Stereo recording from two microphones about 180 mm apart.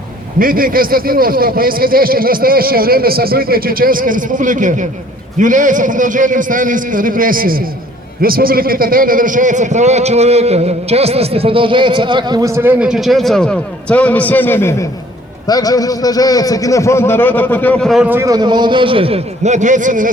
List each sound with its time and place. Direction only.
0.3 s a man's voice: 50° right (ahead or behind)